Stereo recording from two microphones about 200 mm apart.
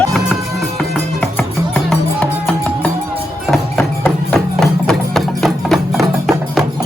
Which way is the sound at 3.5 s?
5° left (ahead or behind).